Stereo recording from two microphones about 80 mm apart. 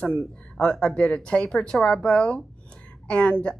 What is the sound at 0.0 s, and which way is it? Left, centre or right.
A woman's voice, centre.